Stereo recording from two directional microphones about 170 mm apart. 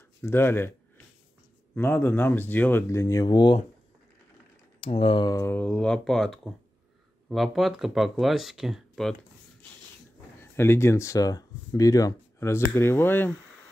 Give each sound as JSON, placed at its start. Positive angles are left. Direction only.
{"t": 0.2, "sound": "speech", "side_deg": 15}
{"t": 1.8, "sound": "speech", "side_deg": 10}
{"t": 4.8, "sound": "speech", "side_deg": 30}
{"t": 10.4, "sound": "speech", "side_deg": 15}